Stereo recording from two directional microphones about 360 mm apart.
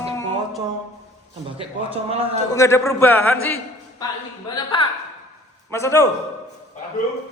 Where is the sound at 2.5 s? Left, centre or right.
Centre.